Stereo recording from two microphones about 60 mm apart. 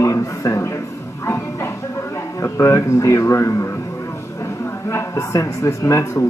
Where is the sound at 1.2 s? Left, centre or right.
Left.